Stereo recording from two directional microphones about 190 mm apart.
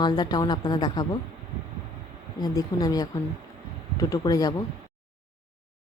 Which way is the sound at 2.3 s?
20° left (ahead or behind).